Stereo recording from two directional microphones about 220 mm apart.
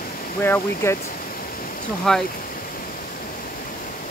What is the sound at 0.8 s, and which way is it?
Speech, 10° left (ahead or behind).